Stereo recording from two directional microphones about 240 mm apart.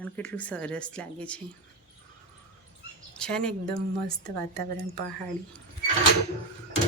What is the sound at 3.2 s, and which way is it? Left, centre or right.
Speech, centre.